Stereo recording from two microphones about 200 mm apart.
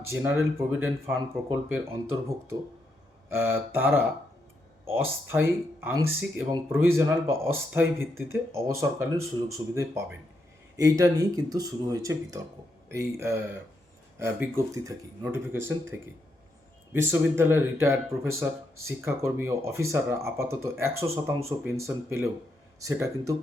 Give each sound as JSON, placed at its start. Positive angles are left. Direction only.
{"t": 0.8, "sound": "speech", "side_deg": -10}